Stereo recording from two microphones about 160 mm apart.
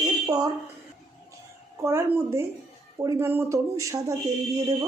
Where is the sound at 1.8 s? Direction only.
15° right (ahead or behind).